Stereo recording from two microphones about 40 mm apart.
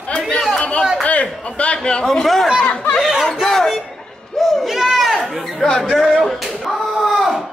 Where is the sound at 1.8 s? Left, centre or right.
Left.